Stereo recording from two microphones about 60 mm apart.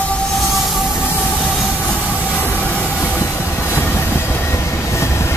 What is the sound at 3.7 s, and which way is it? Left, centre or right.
Train, left.